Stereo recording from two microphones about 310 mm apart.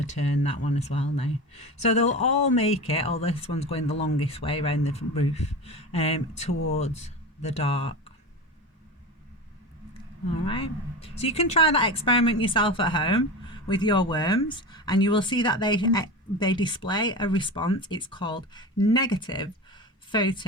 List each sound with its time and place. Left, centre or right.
0.3 s speech: left
0.6 s speech: left
10.4 s speech: centre